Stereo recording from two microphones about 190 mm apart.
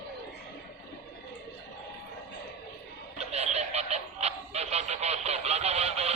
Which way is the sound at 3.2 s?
35° right (ahead or behind).